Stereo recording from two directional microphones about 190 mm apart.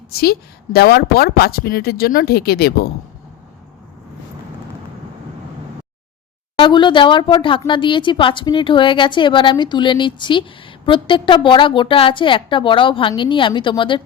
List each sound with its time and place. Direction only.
0.1 s a woman's voice: 55° left (ahead or behind)
6.6 s a woman's voice: 25° left (ahead or behind)